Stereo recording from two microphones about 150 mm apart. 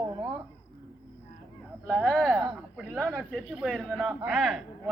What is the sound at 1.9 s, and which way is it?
Speech, 5° right (ahead or behind).